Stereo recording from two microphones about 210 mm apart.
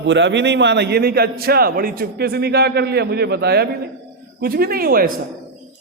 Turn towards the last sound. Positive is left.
turn(degrees=-45)  # may be behind; listen again after turning